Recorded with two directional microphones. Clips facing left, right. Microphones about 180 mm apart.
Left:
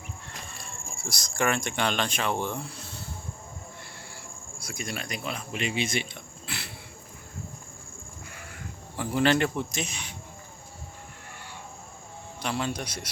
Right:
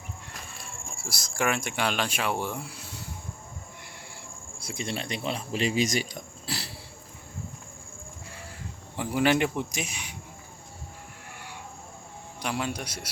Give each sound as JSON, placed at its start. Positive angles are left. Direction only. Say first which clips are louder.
{"t": 0.4, "sound": "speech", "louder": "even", "side_deg": -5}
{"t": 4.6, "sound": "speech", "louder": "right 3 dB", "side_deg": -25}
{"t": 9.0, "sound": "speech", "louder": "even", "side_deg": -10}
{"t": 12.4, "sound": "speech", "louder": "left 1 dB", "side_deg": -10}